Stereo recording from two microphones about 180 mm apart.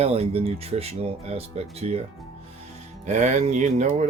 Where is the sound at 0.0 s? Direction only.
35° right (ahead or behind).